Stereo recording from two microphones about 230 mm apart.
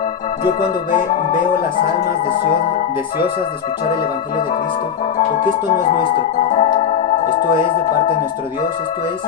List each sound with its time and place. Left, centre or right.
0.6 s music: centre
5.1 s music: left
6.3 s organ: left
6.7 s music: left